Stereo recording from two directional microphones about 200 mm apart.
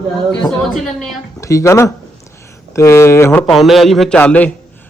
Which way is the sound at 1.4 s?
15° left (ahead or behind).